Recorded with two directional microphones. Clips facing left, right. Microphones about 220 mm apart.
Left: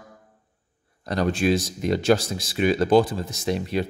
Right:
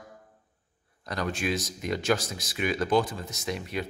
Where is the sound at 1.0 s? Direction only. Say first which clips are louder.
Left 8 dB; 30° left (ahead or behind).